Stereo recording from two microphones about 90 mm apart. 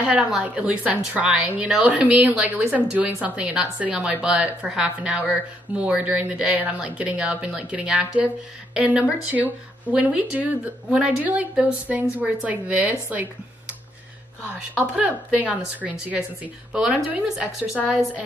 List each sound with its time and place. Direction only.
0.4 s a woman's voice: 15° right (ahead or behind)